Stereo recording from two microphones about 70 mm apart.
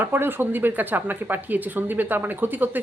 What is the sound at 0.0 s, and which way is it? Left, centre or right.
Speech, right.